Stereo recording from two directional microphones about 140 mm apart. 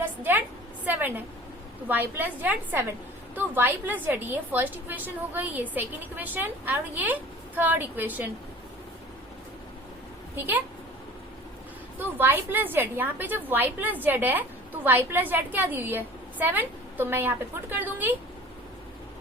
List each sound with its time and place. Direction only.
0.0 s a sound: 15° right (ahead or behind)
0.9 s a woman's voice: 10° right (ahead or behind)
10.3 s a woman's voice: 15° right (ahead or behind)
11.9 s a woman's voice: 15° right (ahead or behind)